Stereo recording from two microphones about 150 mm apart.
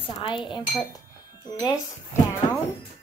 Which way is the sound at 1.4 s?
25° left (ahead or behind).